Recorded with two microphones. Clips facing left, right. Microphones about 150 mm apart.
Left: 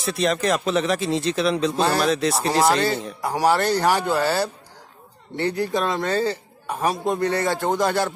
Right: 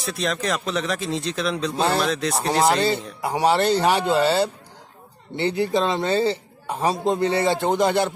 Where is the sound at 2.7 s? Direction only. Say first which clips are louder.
Even; 25° right (ahead or behind).